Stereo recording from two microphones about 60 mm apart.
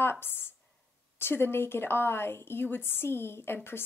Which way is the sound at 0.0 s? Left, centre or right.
Left.